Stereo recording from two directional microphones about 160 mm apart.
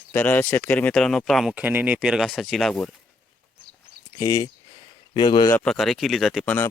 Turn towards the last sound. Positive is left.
turn(degrees=10)  # may be behind; listen again after turning